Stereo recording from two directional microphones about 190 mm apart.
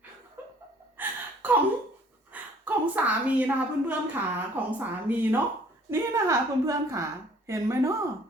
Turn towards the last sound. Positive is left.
turn(degrees=-15)  # may be behind; listen again after turning